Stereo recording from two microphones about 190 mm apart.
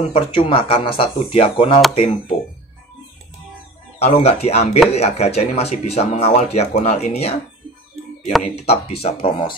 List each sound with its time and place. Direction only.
0.1 s speech: 30° left (ahead or behind)
4.0 s speech: 30° left (ahead or behind)
8.5 s speech: 30° left (ahead or behind)